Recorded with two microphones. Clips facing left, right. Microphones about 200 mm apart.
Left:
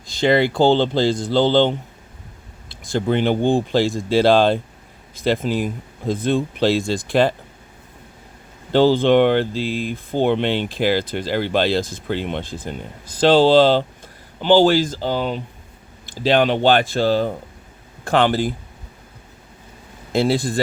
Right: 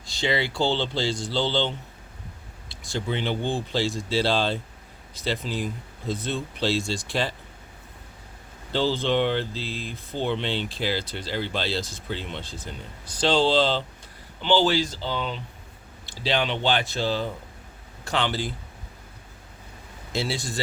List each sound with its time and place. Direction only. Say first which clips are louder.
0.1 s speech: left 10 dB; 55° left (ahead or behind)
8.7 s speech: left 10 dB; 55° left (ahead or behind)
9.5 s speech: left 10 dB; 15° left (ahead or behind)
9.8 s speech: left 9 dB; 55° left (ahead or behind)
20.1 s speech: left 10 dB; 55° left (ahead or behind)